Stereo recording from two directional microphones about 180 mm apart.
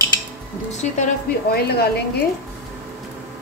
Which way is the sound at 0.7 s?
45° left (ahead or behind).